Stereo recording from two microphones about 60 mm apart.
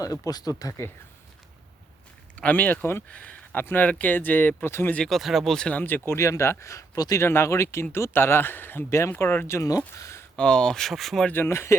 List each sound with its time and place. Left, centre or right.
0.0 s speech: left
2.3 s speech: left
3.5 s speech: left
5.0 s speech: centre
6.1 s speech: left
6.9 s speech: left
7.2 s speech: left
8.9 s speech: left
9.6 s speech: left
10.3 s speech: centre
11.4 s speech: left